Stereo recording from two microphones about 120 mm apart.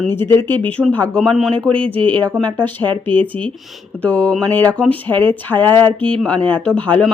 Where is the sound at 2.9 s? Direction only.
45° right (ahead or behind).